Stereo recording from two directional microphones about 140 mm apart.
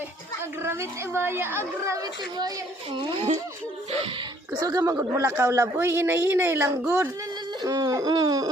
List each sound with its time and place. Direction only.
0.6 s a woman's voice: 15° right (ahead or behind)
2.9 s speech: 35° right (ahead or behind)
4.6 s a man's voice: 25° right (ahead or behind)